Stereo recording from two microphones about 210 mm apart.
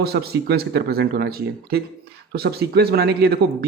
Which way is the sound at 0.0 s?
50° right (ahead or behind).